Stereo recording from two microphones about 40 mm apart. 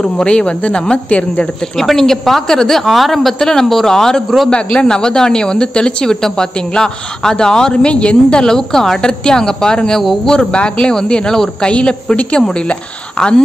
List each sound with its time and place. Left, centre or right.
0.2 s speech: left
1.8 s a man's voice: centre
4.5 s speech: left
8.5 s a man's voice: centre